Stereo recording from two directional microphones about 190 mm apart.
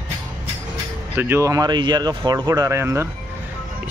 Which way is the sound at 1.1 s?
10° right (ahead or behind).